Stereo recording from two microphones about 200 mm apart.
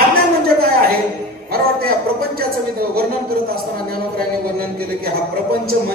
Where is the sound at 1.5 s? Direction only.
50° right (ahead or behind).